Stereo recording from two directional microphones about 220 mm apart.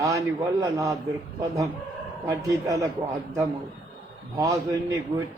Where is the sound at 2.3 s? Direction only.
15° right (ahead or behind).